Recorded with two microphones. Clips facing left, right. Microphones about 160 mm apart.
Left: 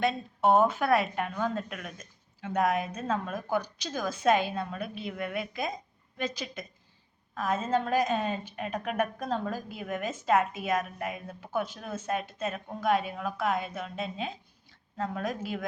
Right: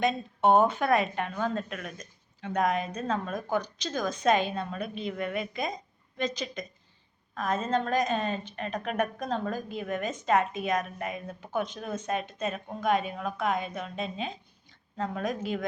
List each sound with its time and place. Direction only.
0.0 s a woman's voice: centre (ahead or behind)